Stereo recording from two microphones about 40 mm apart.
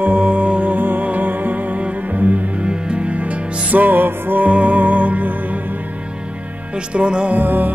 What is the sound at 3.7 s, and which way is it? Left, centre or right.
Music, right.